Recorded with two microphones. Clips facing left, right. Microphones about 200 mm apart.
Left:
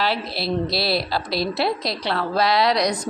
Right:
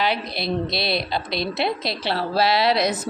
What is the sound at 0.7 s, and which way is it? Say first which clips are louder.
A woman's voice: left 2 dB; 20° right (ahead or behind).